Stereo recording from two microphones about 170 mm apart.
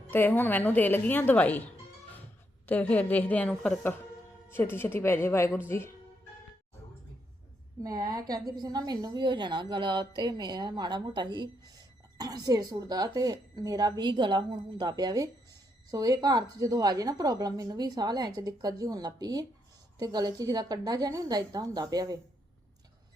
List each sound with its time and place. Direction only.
0.1 s a woman's voice: 10° left (ahead or behind)
2.6 s a woman's voice: 10° left (ahead or behind)
7.8 s a woman's voice: 20° right (ahead or behind)